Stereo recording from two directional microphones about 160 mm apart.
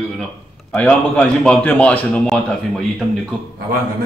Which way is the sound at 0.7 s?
5° left (ahead or behind).